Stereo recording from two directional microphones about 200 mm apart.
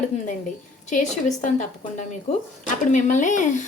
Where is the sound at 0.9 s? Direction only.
40° left (ahead or behind).